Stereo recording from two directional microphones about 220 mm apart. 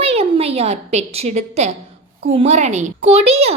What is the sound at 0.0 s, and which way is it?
A woman's voice, 25° right (ahead or behind).